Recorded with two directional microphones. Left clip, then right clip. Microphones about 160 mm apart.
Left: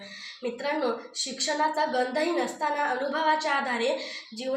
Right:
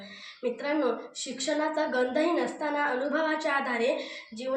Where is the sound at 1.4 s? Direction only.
25° right (ahead or behind).